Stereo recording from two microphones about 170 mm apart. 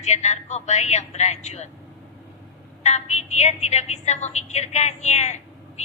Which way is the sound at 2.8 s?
40° left (ahead or behind).